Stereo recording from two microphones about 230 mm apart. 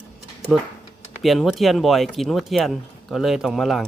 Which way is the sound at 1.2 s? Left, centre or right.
Centre.